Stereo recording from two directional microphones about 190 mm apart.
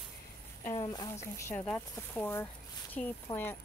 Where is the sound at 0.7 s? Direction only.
20° left (ahead or behind).